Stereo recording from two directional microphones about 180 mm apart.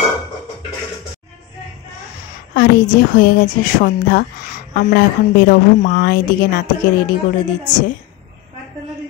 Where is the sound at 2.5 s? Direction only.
55° left (ahead or behind).